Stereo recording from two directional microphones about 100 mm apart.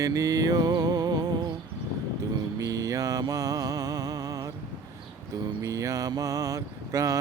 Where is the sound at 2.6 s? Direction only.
30° right (ahead or behind).